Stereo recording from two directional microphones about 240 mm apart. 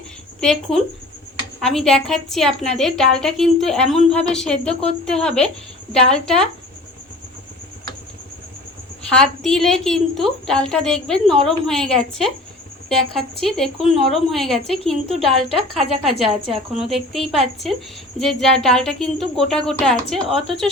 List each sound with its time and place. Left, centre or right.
0.3 s a woman's voice: centre
4.7 s speech: left
5.0 s a woman's voice: centre
9.0 s a woman's voice: centre